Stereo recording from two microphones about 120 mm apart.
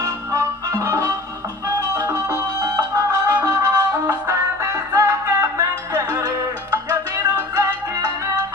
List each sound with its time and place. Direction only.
0.3 s music: 25° right (ahead or behind)